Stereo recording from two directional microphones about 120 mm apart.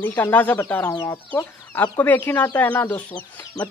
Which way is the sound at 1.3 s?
15° left (ahead or behind).